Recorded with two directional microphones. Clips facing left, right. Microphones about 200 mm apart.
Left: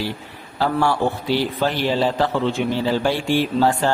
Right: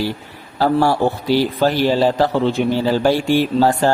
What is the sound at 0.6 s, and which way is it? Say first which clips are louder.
A man's voice: right 4 dB; 40° right (ahead or behind).